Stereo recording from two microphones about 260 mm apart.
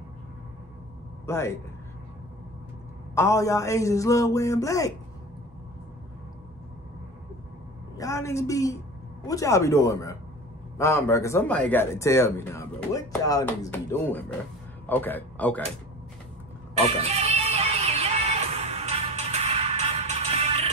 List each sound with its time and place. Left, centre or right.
1.2 s speech: centre
3.2 s speech: centre
8.0 s a man's voice: centre
17.0 s music: right